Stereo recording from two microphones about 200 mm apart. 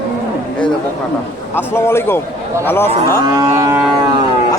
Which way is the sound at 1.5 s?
10° left (ahead or behind).